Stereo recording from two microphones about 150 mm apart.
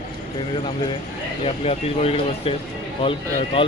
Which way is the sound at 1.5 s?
40° left (ahead or behind).